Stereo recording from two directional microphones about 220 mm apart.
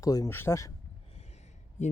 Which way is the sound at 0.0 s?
15° left (ahead or behind).